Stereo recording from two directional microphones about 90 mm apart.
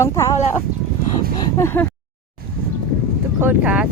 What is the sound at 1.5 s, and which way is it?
Speech, 30° left (ahead or behind).